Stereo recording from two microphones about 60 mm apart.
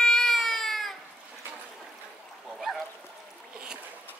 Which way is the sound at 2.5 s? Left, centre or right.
Centre.